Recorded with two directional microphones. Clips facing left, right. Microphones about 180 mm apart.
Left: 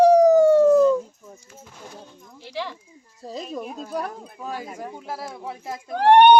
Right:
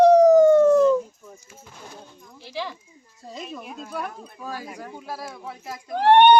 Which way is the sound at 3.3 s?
40° left (ahead or behind).